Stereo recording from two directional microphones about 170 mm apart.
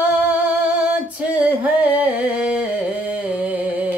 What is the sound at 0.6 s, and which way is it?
Singing, 10° right (ahead or behind).